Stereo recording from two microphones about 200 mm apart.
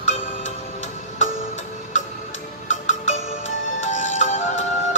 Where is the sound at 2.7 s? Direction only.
35° left (ahead or behind).